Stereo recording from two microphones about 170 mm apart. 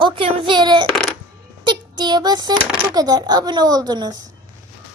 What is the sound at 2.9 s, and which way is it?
A woman's voice, 20° right (ahead or behind).